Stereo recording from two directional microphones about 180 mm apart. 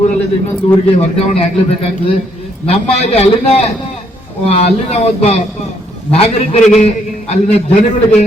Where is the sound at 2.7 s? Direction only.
35° left (ahead or behind).